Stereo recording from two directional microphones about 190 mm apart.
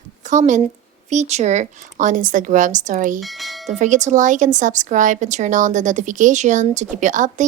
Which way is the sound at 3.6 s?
40° right (ahead or behind).